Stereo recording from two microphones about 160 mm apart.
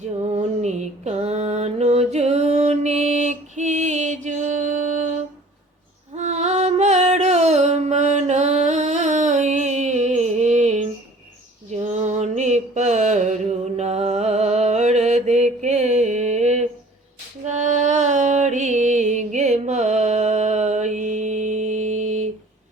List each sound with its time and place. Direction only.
0.3 s mantra: 45° right (ahead or behind)
6.1 s music: 45° right (ahead or behind)
11.7 s mantra: 45° right (ahead or behind)
17.4 s music: 45° right (ahead or behind)